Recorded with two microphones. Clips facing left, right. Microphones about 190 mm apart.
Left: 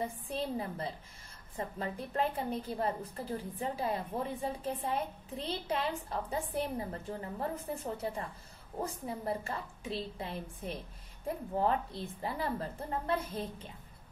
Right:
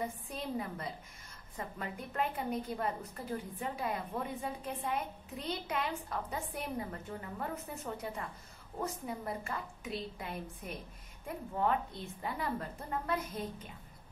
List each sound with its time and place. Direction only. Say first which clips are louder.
0.0 s a woman's voice: left 3 dB; 30° left (ahead or behind)